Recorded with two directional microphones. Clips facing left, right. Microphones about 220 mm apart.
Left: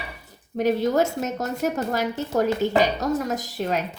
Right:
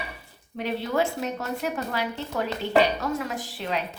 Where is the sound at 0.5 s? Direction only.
45° left (ahead or behind).